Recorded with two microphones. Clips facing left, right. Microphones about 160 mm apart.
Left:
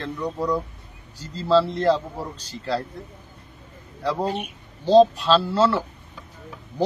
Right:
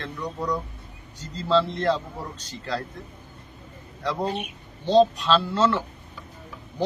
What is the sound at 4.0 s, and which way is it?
Speech, 35° left (ahead or behind).